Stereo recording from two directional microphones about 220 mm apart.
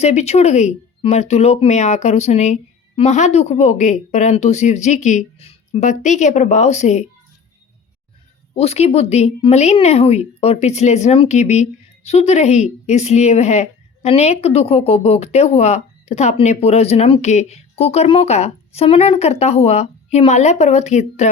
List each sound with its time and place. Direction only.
0.0 s speech: 30° left (ahead or behind)
8.5 s a woman's voice: 30° left (ahead or behind)